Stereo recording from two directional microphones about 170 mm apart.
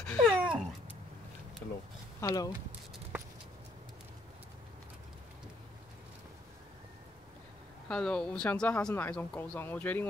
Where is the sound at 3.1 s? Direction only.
10° right (ahead or behind).